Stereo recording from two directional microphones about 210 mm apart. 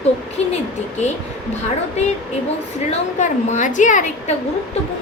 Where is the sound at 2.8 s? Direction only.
35° left (ahead or behind).